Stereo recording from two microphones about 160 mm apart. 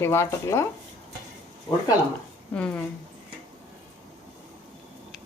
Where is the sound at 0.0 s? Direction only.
15° left (ahead or behind).